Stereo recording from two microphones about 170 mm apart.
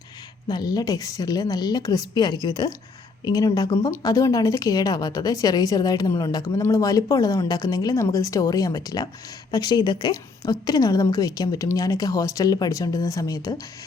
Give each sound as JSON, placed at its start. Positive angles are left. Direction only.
{"t": 0.4, "sound": "a woman's voice", "side_deg": 25}